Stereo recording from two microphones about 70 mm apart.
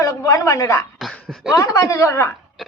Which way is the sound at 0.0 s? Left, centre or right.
Left.